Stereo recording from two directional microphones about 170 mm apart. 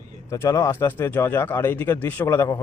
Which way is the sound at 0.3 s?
20° left (ahead or behind).